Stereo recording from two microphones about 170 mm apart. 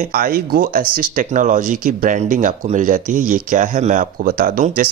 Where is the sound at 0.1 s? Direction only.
60° right (ahead or behind).